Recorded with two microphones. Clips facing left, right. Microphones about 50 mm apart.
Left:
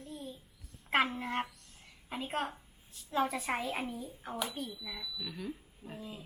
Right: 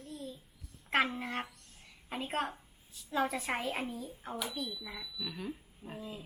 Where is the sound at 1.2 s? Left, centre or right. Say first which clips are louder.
Left 2 dB; centre.